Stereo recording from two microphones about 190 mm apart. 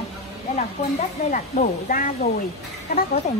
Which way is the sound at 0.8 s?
35° left (ahead or behind).